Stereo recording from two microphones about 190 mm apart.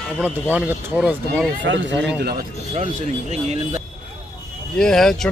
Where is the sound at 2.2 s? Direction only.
55° right (ahead or behind).